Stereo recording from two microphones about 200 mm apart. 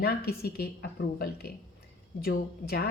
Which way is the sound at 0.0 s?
50° left (ahead or behind).